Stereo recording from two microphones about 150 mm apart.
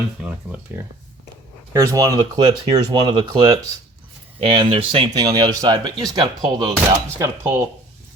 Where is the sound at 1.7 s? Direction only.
20° right (ahead or behind); by 5.1 s 40° right (ahead or behind).